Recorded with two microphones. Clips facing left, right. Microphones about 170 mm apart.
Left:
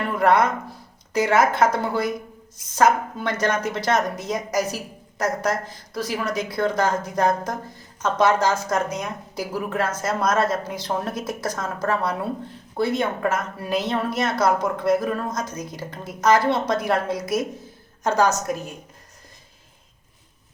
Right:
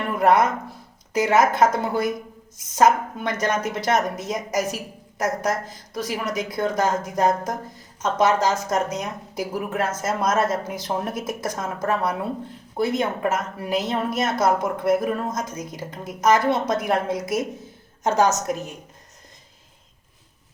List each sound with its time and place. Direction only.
0.2 s speech: 20° right (ahead or behind)